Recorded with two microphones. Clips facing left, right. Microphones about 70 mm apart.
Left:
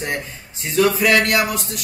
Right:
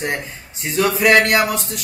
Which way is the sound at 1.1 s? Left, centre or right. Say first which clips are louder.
Right 3 dB; right.